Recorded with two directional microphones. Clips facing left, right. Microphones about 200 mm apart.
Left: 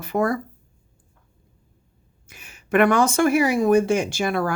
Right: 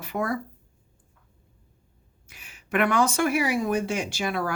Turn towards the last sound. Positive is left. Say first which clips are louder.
# left 5 dB
turn(degrees=45)  # may be behind; listen again after turning